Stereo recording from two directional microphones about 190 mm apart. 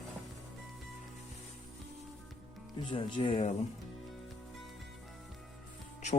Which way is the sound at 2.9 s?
25° left (ahead or behind).